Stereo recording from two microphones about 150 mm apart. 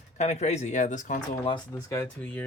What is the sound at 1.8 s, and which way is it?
Speech, 20° left (ahead or behind).